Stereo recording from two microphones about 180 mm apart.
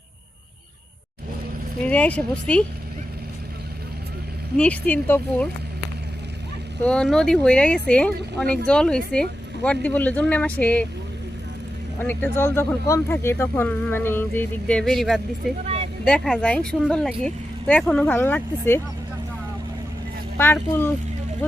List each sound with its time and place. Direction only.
1.9 s speech: 5° left (ahead or behind)
4.5 s speech: 5° left (ahead or behind)
6.8 s speech: 5° left (ahead or behind)
11.9 s speech: 10° left (ahead or behind)
15.6 s a sound: 35° right (ahead or behind)
16.0 s speech: 5° left (ahead or behind)
20.4 s speech: 10° left (ahead or behind)